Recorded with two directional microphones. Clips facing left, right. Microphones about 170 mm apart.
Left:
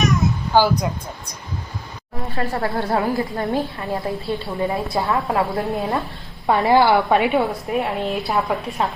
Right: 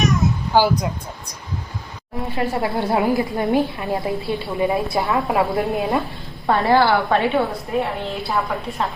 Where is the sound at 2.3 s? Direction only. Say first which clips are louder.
Right 1 dB; 15° right (ahead or behind).